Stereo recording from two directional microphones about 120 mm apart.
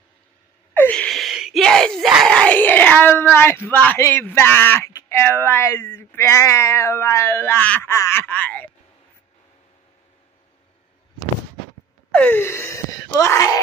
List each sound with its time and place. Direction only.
0.7 s speech: 10° left (ahead or behind)
7.9 s a sound: 20° left (ahead or behind)
12.1 s speech: 15° left (ahead or behind)